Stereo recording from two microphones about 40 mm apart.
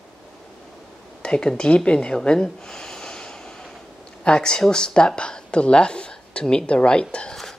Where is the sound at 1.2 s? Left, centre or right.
Left.